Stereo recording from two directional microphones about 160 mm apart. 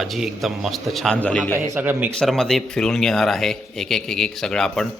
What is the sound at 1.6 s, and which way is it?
Speech, 10° right (ahead or behind).